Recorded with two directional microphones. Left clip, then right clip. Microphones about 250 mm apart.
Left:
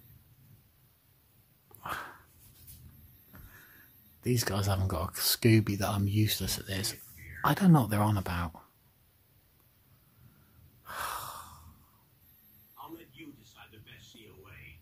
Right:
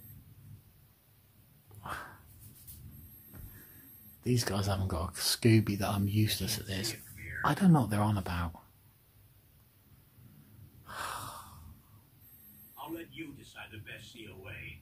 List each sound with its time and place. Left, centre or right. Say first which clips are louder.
1.8 s dog: left 3 dB; left
4.2 s speech: left 1 dB; left
10.9 s gasp: left 2 dB; left